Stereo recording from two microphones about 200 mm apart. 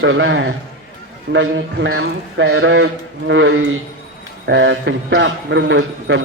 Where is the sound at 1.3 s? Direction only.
65° right (ahead or behind).